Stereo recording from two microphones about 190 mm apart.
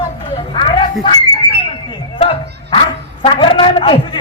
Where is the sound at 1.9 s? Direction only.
30° left (ahead or behind).